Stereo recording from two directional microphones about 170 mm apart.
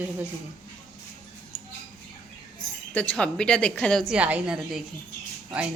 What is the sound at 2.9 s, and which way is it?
A woman's voice, 5° left (ahead or behind).